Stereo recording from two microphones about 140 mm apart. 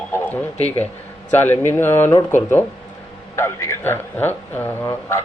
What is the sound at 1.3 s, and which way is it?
Speech, 15° left (ahead or behind).